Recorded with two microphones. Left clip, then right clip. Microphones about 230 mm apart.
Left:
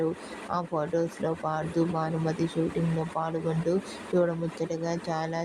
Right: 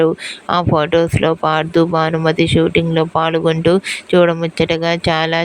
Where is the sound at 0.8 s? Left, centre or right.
Right.